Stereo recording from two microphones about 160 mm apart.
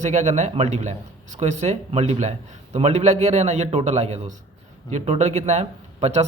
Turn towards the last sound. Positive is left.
turn(degrees=-40)  # may be behind; listen again after turning